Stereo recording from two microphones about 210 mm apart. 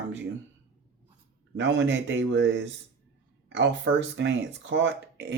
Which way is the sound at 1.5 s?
55° right (ahead or behind).